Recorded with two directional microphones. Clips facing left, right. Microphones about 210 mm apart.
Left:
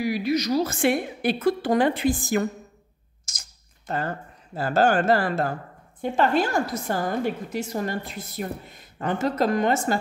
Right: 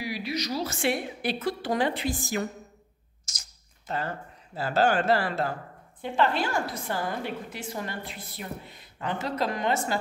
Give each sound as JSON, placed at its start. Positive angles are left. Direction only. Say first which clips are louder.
{"t": 0.0, "sound": "a woman's voice", "louder": "left 8 dB", "side_deg": 50}
{"t": 3.3, "sound": "a sound", "louder": "left 2 dB", "side_deg": 50}
{"t": 4.6, "sound": "a woman's voice", "louder": "left 3 dB", "side_deg": 45}